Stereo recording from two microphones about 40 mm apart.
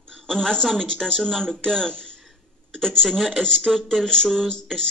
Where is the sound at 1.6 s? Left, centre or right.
Centre.